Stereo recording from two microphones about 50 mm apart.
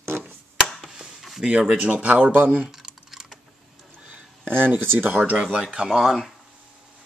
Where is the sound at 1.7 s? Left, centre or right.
Right.